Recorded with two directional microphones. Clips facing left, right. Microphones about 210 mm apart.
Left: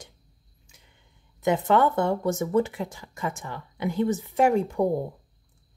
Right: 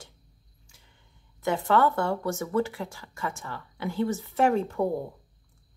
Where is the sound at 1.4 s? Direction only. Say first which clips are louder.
Left 2 dB; 20° left (ahead or behind).